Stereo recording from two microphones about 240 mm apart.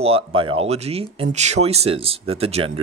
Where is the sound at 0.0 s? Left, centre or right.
Right.